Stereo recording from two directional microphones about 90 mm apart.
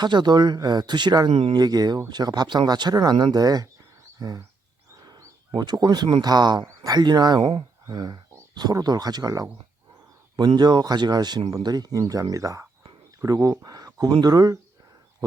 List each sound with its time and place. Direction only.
0.0 s speech: 55° right (ahead or behind)
5.0 s a sound: 40° right (ahead or behind)
5.5 s speech: 50° right (ahead or behind)